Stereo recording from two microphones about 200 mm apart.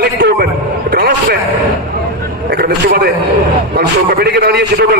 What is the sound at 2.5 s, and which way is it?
A man's voice, 55° right (ahead or behind).